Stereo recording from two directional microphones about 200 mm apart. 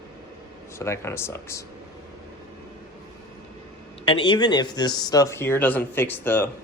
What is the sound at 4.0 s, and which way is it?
Speech, 25° left (ahead or behind).